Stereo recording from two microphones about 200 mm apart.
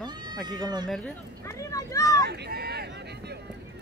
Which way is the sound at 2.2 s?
50° right (ahead or behind).